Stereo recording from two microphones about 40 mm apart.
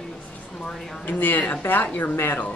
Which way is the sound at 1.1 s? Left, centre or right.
Left.